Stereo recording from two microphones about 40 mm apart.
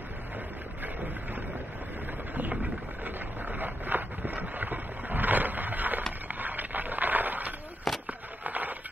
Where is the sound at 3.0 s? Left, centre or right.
Right.